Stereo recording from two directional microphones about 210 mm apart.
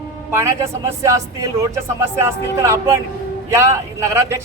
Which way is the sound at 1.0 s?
15° right (ahead or behind).